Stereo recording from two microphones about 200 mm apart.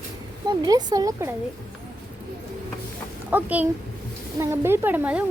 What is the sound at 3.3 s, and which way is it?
Speech, 10° right (ahead or behind).